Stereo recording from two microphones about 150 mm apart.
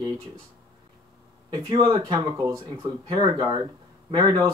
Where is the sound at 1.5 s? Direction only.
40° right (ahead or behind).